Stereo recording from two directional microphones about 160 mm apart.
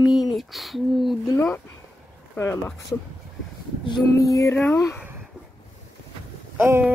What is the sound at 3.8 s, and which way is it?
Female singing, 25° left (ahead or behind).